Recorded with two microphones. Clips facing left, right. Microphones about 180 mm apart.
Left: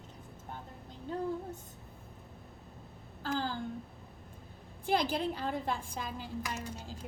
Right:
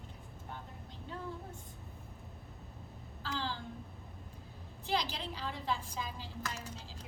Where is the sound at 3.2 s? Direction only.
50° left (ahead or behind).